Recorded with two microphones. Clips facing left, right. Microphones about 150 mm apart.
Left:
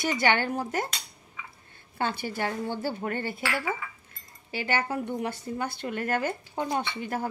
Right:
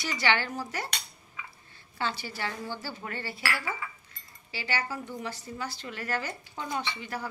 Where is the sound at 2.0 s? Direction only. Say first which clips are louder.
Left 4 dB; 55° left (ahead or behind).